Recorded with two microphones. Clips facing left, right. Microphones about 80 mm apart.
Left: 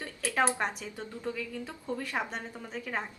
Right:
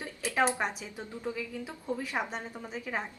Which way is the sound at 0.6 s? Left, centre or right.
Centre.